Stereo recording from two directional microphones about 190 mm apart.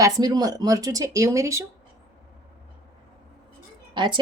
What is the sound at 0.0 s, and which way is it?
Speech, 20° right (ahead or behind).